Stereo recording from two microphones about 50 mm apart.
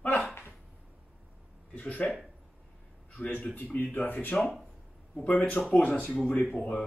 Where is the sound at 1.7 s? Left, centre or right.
Left.